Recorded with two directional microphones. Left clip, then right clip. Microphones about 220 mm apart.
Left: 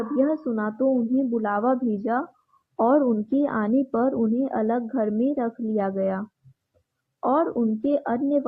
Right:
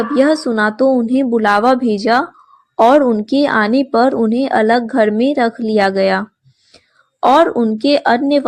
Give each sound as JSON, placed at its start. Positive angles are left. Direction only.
{"t": 0.2, "sound": "a woman's voice", "side_deg": -40}
{"t": 7.8, "sound": "a woman's voice", "side_deg": -25}